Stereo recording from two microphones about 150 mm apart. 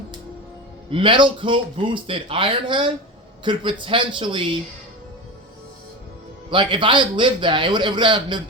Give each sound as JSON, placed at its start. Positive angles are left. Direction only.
{"t": 0.9, "sound": "speech", "side_deg": -35}
{"t": 6.5, "sound": "speech", "side_deg": -35}